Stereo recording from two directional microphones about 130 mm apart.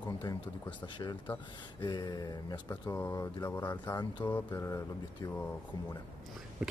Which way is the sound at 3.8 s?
35° left (ahead or behind).